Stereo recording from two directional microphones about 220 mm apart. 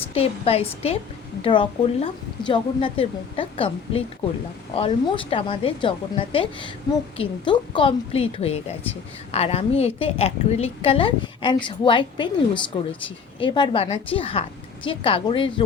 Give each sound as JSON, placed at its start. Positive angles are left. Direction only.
{"t": 0.1, "sound": "a woman's voice", "side_deg": 25}
{"t": 13.4, "sound": "a woman's voice", "side_deg": 20}